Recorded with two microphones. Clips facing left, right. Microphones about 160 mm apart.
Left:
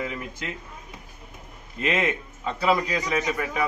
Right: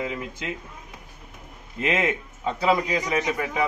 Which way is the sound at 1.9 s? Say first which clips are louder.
Right 1 dB; 10° right (ahead or behind).